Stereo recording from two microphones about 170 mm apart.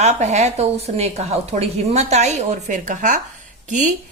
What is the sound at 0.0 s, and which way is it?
A woman's voice, 40° right (ahead or behind).